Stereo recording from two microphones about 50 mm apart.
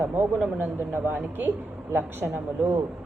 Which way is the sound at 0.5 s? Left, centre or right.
Right.